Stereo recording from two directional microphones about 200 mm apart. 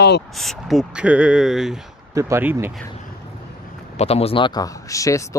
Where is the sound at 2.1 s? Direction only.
15° right (ahead or behind).